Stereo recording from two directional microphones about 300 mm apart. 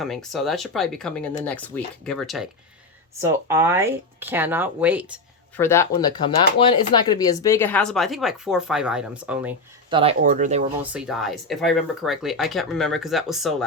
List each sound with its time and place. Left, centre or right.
0.0 s speech: centre
5.5 s speech: centre
9.9 s speech: centre
10.9 s speech: centre